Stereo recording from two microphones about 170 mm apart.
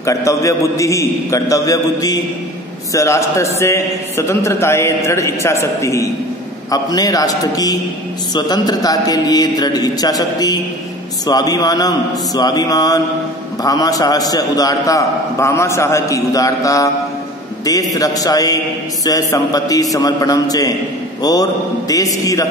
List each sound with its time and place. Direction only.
0.0 s a man's voice: 20° left (ahead or behind)
17.9 s a man's voice: 20° left (ahead or behind)